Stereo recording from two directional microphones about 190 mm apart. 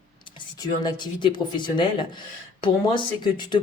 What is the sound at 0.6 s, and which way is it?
Speech, 20° left (ahead or behind).